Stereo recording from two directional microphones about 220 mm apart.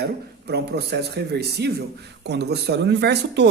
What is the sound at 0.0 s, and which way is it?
Speech, 50° right (ahead or behind).